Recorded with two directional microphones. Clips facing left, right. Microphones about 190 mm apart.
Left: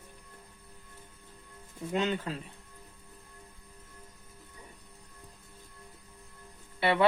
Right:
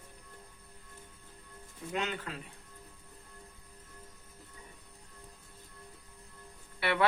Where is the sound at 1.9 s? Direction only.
30° left (ahead or behind).